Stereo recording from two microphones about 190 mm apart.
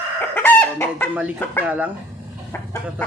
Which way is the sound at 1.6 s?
10° right (ahead or behind).